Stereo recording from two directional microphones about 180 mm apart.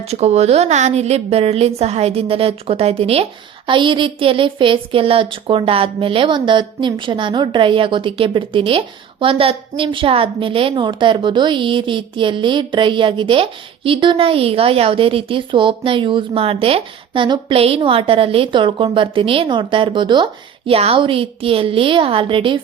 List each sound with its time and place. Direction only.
0.0 s a woman's voice: 35° right (ahead or behind)